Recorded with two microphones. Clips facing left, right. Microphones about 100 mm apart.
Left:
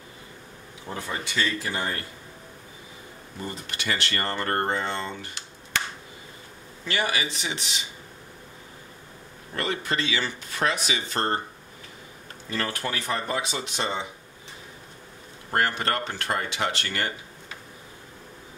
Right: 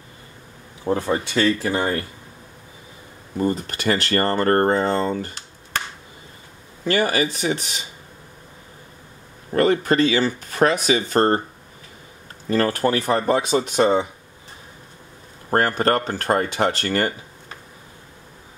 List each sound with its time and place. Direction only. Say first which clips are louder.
0.8 s speech: right 11 dB; 50° right (ahead or behind)
3.3 s speech: right 13 dB; 45° right (ahead or behind)
6.8 s speech: right 8 dB; 40° right (ahead or behind)
9.5 s speech: right 11 dB; 45° right (ahead or behind)
12.4 s speech: right 11 dB; 40° right (ahead or behind)
15.5 s speech: right 7 dB; 40° right (ahead or behind)